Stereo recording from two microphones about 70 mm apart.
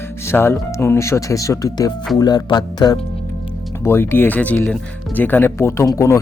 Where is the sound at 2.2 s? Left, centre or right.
Left.